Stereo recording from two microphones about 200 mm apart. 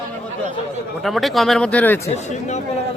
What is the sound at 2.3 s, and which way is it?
Speech, 35° left (ahead or behind).